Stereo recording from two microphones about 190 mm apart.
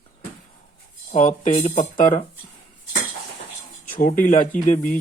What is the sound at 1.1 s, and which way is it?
Speech, 40° left (ahead or behind).